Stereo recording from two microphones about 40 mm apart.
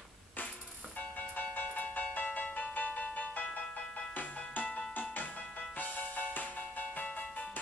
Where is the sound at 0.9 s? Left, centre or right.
Left.